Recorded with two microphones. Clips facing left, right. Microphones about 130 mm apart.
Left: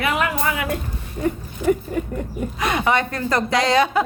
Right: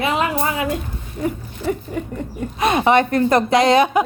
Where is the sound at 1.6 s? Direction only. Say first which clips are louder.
Left 4 dB; 15° left (ahead or behind).